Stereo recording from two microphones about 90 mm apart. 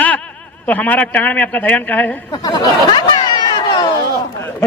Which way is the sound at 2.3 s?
55° left (ahead or behind).